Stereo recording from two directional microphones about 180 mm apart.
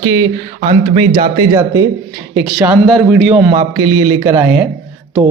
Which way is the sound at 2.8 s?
Centre (ahead or behind).